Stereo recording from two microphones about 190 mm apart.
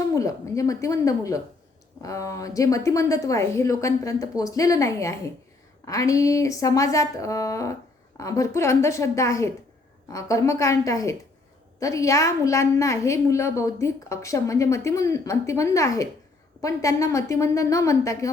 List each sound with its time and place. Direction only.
0.1 s a woman's voice: 15° left (ahead or behind)